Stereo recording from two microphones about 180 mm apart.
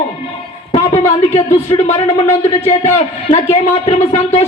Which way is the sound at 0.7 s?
35° left (ahead or behind).